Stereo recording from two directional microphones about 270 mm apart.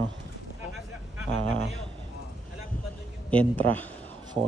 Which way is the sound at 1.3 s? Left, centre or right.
Right.